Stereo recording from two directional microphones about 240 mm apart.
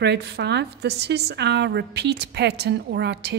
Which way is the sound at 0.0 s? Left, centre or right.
Right.